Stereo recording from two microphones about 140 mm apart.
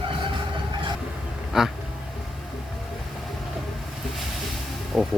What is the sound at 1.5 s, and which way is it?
Speech, 5° right (ahead or behind).